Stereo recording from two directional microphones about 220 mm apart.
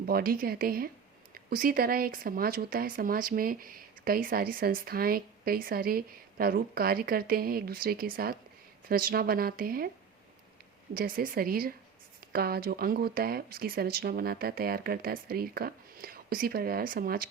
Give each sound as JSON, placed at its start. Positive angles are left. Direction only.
{"t": 0.0, "sound": "speech", "side_deg": -45}
{"t": 10.9, "sound": "speech", "side_deg": -40}